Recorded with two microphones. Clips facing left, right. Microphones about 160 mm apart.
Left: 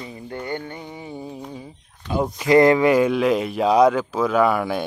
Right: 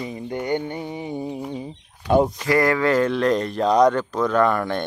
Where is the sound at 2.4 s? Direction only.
20° left (ahead or behind).